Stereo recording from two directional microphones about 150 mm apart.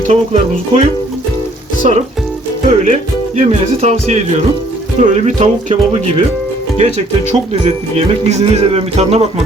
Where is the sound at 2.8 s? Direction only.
55° right (ahead or behind).